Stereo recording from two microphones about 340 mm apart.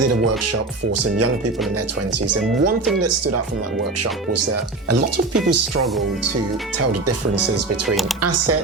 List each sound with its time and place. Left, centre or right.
3.0 s speech: right
4.9 s speech: right
8.2 s speech: right